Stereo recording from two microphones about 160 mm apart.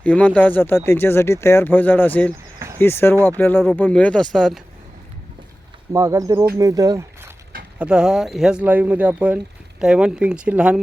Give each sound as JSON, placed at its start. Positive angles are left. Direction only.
{"t": 0.0, "sound": "speech", "side_deg": 10}
{"t": 2.6, "sound": "a sound", "side_deg": -20}
{"t": 2.8, "sound": "speech", "side_deg": 15}
{"t": 5.9, "sound": "speech", "side_deg": -20}
{"t": 7.8, "sound": "speech", "side_deg": -5}